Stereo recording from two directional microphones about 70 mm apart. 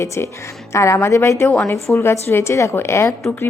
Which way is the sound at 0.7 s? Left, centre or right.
Left.